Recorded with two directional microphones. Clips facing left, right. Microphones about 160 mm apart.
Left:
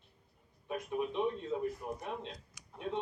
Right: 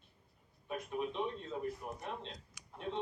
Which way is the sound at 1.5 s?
5° left (ahead or behind).